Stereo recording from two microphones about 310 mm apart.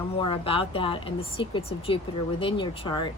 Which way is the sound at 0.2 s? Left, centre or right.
Centre.